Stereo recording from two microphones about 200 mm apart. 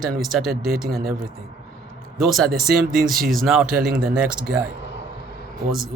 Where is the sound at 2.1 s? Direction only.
Centre (ahead or behind).